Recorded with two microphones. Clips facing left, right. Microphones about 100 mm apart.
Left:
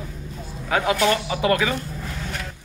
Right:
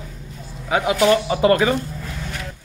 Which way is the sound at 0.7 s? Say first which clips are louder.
Right 4 dB; 15° right (ahead or behind).